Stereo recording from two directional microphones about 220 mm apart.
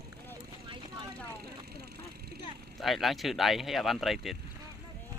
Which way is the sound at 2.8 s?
Centre (ahead or behind).